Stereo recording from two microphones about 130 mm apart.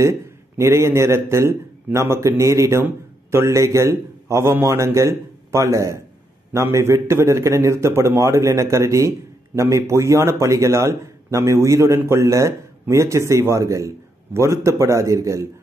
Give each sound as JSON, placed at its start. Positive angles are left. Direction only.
{"t": 0.6, "sound": "a man's voice", "side_deg": -20}